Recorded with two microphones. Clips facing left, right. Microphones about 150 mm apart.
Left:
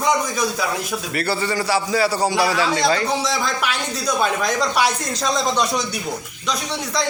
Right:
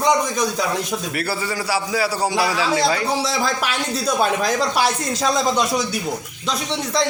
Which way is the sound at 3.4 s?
35° right (ahead or behind).